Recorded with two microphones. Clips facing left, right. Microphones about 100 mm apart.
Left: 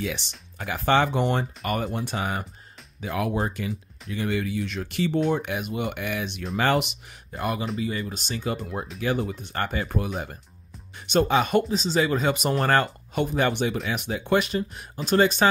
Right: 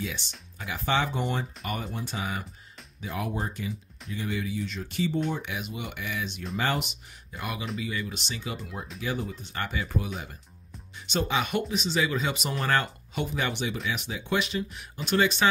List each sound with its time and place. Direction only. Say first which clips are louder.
0.6 s speech: left 6 dB; 60° left (ahead or behind)
3.0 s speech: left 6 dB; 90° left; by 5.2 s 70° left (ahead or behind)
5.3 s speech: left 7 dB; 50° left (ahead or behind)
6.6 s speech: left 6 dB; 75° left (ahead or behind)
7.3 s speech: left 6 dB; 45° left (ahead or behind)
11.1 s speech: left 7 dB; 50° left (ahead or behind)